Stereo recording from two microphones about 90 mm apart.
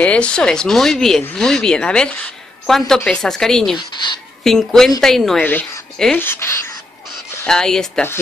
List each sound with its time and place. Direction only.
0.0 s speech: 15° left (ahead or behind)
3.7 s speech: 60° left (ahead or behind)
4.4 s speech: 5° left (ahead or behind)
5.4 s speech: 20° left (ahead or behind)
7.4 s speech: 5° left (ahead or behind)